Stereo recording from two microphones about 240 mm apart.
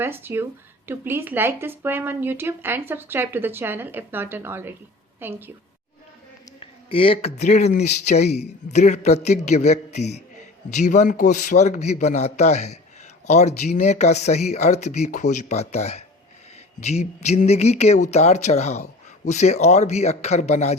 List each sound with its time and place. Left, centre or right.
0.0 s speech: centre
6.6 s speech: left